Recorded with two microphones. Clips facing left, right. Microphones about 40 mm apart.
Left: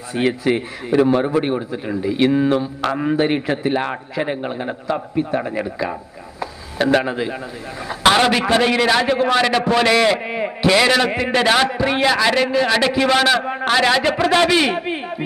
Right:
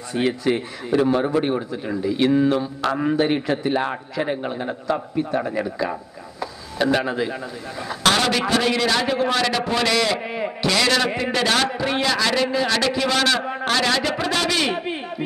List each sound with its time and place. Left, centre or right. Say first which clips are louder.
0.1 s speech: left 3 dB; centre
7.0 s a man's voice: left 2 dB; centre